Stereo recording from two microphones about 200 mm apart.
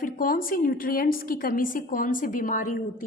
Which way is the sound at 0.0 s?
45° left (ahead or behind).